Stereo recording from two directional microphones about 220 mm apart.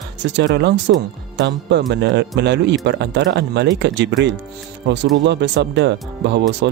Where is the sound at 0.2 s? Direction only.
55° right (ahead or behind).